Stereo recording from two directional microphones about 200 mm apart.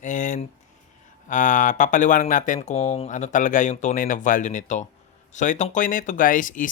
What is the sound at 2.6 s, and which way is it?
Speech, 30° left (ahead or behind).